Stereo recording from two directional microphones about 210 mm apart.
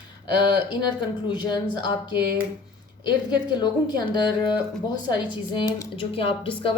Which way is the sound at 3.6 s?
20° left (ahead or behind).